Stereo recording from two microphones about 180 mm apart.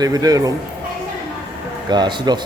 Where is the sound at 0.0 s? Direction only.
20° right (ahead or behind).